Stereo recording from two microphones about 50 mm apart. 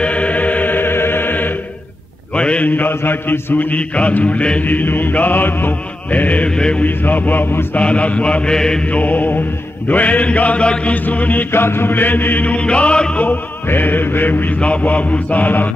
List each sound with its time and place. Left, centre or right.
0.0 s music: left
2.3 s a sound: left
2.7 s mantra: left
4.2 s chant: left
4.6 s mantra: left
6.5 s speech: centre
6.8 s mantra: left
7.7 s chant: left
8.8 s mantra: left
9.8 s chant: left
11.5 s mantra: left
12.5 s chant: left
13.7 s mantra: left
14.6 s chant: left